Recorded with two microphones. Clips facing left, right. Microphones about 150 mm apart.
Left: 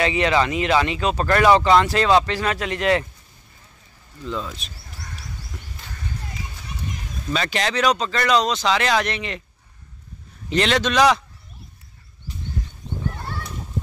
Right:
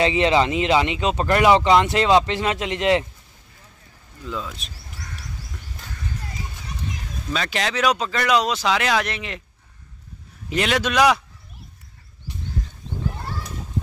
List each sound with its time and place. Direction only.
0.0 s speech: 25° right (ahead or behind)
4.3 s speech: centre (ahead or behind)
7.3 s speech: centre (ahead or behind)
10.5 s a man's voice: 5° right (ahead or behind)